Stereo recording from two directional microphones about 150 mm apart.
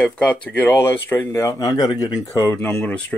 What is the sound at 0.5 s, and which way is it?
Speech, 15° left (ahead or behind).